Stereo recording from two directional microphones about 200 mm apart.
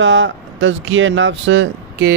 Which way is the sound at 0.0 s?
70° right (ahead or behind).